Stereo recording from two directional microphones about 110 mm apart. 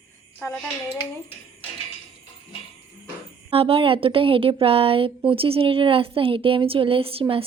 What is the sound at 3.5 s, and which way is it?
A woman's voice, 55° right (ahead or behind).